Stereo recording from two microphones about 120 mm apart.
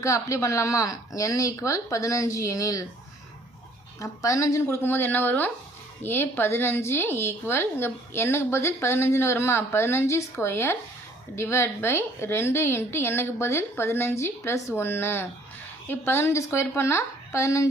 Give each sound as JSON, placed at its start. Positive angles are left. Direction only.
{"t": 0.0, "sound": "a woman's voice", "side_deg": 25}
{"t": 4.0, "sound": "a woman's voice", "side_deg": 25}